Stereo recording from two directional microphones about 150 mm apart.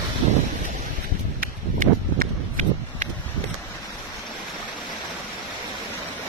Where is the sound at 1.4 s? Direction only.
65° right (ahead or behind).